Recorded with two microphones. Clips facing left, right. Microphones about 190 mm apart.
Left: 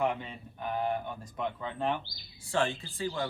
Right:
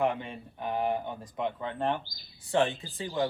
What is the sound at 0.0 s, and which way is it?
Speech, 20° right (ahead or behind).